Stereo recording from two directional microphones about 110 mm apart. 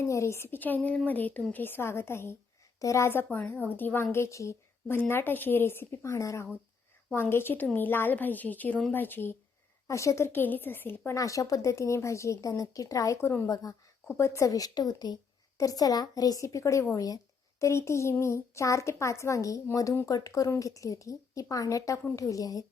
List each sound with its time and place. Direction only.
0.0 s a child's voice: 25° left (ahead or behind)
11.2 s a child's voice: 30° left (ahead or behind)